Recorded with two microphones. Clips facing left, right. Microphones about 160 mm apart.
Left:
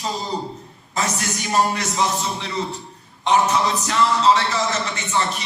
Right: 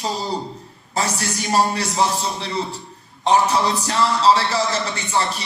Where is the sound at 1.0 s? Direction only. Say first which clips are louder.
Right 1 dB; 35° right (ahead or behind).